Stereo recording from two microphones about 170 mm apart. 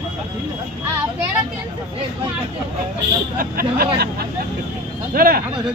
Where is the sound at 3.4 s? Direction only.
60° right (ahead or behind).